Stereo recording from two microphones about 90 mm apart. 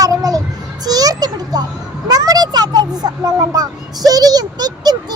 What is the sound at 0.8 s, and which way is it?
Speech, 45° right (ahead or behind).